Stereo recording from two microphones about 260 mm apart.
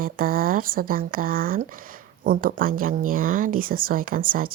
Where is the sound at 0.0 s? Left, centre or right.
Right.